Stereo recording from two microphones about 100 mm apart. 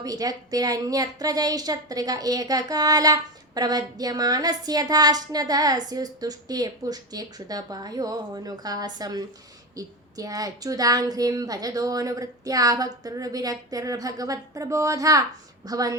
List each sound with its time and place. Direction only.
0.0 s a woman's voice: 40° right (ahead or behind)